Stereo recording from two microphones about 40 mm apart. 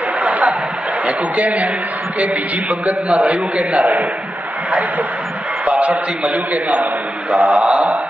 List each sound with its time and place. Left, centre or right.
0.2 s a sound: right
1.4 s a man's voice: right
2.7 s a man's voice: right
6.3 s a man's voice: right